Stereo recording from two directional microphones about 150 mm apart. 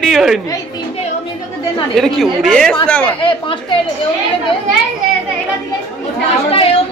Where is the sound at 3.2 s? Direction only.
35° left (ahead or behind).